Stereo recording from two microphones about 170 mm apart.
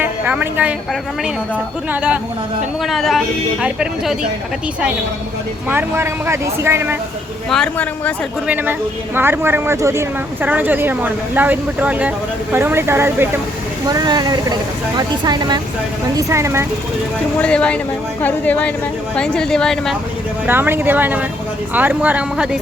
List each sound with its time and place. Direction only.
0.0 s a sound: 10° right (ahead or behind)
1.2 s a woman's voice: 10° right (ahead or behind)
5.6 s speech: 15° right (ahead or behind)
7.5 s speech: 5° left (ahead or behind)
8.4 s speech: 10° right (ahead or behind)
17.3 s a woman's voice: 5° left (ahead or behind)
20.5 s speech: 15° right (ahead or behind)